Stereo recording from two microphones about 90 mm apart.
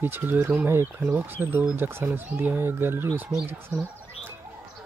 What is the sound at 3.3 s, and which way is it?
Speech, 10° right (ahead or behind).